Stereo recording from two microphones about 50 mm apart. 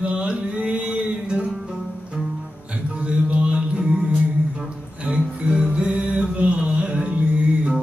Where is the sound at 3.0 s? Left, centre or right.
Right.